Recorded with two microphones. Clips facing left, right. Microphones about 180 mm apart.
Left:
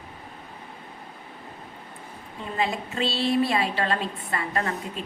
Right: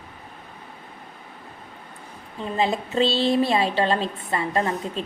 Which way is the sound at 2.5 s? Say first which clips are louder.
Right 5 dB; 30° right (ahead or behind).